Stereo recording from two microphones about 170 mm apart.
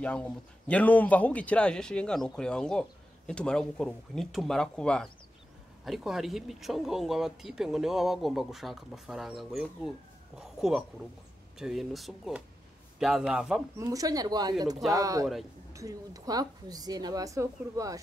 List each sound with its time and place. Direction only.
0.0 s a man's voice: 5° left (ahead or behind)
13.7 s a woman's voice: 20° right (ahead or behind)